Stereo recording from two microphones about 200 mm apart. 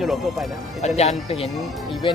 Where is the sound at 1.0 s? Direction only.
30° left (ahead or behind).